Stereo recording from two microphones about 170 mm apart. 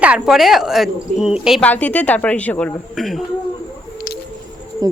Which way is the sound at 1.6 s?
10° left (ahead or behind).